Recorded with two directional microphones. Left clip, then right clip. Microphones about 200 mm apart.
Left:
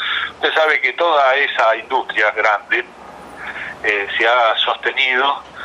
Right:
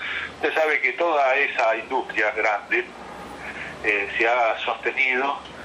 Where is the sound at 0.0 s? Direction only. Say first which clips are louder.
Left 7 dB; 15° right (ahead or behind).